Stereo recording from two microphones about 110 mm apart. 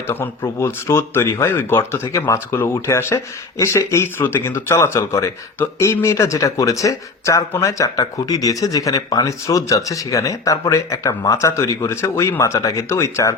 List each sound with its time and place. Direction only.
0.1 s speech: 25° left (ahead or behind)